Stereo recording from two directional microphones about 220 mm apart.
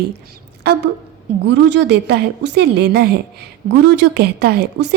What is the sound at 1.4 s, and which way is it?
Speech, 50° right (ahead or behind).